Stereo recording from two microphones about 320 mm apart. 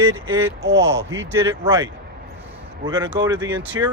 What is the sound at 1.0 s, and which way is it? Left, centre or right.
Speech, centre.